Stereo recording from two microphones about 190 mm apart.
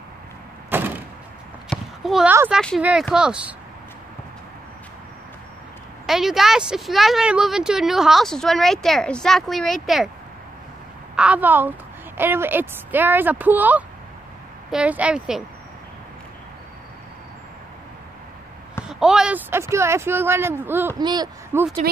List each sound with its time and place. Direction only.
0.7 s door: 10° right (ahead or behind)
1.7 s clip-clop: centre (ahead or behind)
2.3 s speech: 10° right (ahead or behind)
6.0 s speech: centre (ahead or behind)
11.1 s speech: 5° right (ahead or behind)
18.9 s speech: 5° right (ahead or behind)
21.0 s speech: 20° right (ahead or behind)